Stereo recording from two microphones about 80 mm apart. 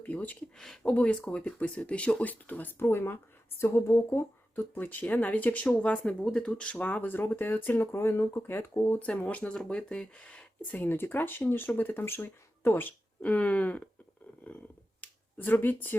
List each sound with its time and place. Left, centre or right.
0.1 s speech: centre
0.6 s speech: centre; by 9.0 s left
9.0 s speech: centre
15.0 s a sound: left